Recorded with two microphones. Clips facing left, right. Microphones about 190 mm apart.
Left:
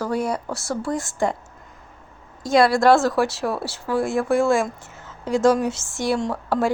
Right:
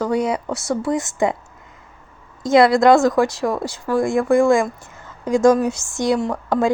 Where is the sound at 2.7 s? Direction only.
15° right (ahead or behind).